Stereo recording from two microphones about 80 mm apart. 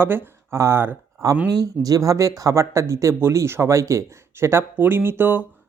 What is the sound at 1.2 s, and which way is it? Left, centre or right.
Speech, right.